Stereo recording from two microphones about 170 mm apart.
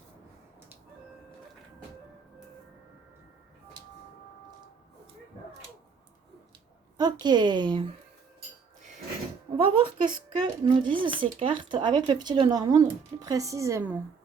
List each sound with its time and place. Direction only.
6.9 s speech: 25° right (ahead or behind)
9.6 s speech: 30° right (ahead or behind); by 14.0 s 15° right (ahead or behind)